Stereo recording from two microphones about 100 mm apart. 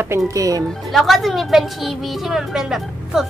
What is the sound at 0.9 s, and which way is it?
A woman's voice, centre (ahead or behind).